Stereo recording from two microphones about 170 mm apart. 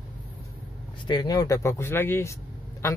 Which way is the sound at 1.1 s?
25° left (ahead or behind).